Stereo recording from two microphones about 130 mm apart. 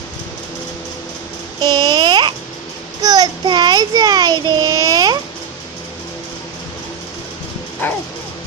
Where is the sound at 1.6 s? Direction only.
35° right (ahead or behind).